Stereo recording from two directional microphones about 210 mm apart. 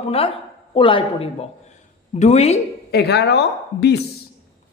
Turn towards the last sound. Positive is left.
turn(degrees=55)  # may be behind; listen again after turning